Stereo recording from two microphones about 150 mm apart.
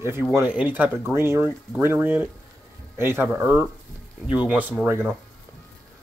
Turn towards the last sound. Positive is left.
turn(degrees=-15)  # may be behind; listen again after turning